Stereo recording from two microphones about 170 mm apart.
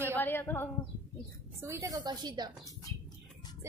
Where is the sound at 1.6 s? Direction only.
15° right (ahead or behind).